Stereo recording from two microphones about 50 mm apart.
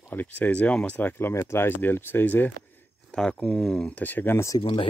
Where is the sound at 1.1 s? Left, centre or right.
Left.